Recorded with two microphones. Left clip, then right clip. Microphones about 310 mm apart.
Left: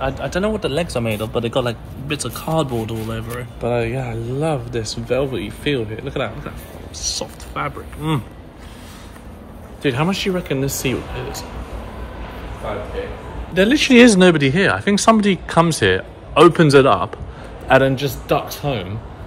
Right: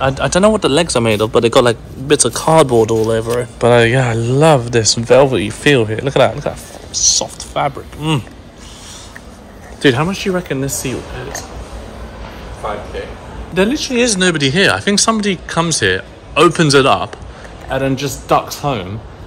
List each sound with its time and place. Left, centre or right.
0.1 s speech: right
9.9 s speech: centre
13.7 s speech: left
14.2 s speech: centre